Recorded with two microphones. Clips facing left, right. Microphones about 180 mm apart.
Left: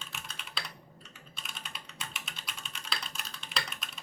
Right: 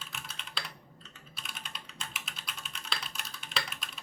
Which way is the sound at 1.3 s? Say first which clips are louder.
Even; centre (ahead or behind).